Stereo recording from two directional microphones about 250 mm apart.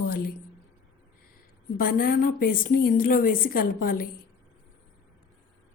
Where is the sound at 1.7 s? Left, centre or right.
Left.